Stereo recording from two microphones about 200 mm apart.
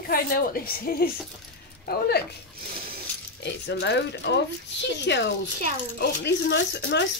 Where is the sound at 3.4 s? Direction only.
60° left (ahead or behind).